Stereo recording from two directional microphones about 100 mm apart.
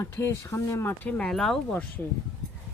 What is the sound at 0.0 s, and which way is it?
Speech, 25° left (ahead or behind).